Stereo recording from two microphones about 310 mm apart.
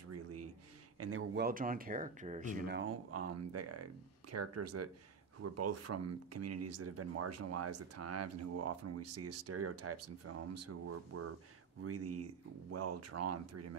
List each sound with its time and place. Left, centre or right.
0.1 s a sound: right
0.9 s speech: right
2.9 s speech: right